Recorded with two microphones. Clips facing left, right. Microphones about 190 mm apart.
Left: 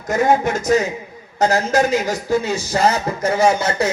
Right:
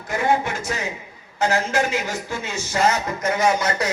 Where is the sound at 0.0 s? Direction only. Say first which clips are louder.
Left 5 dB; 40° left (ahead or behind).